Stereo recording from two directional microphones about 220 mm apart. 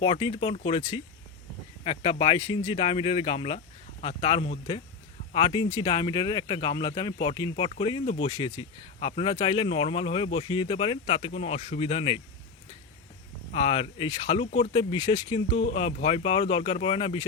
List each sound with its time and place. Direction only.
0.0 s speech: 25° left (ahead or behind)
13.5 s speech: 30° left (ahead or behind)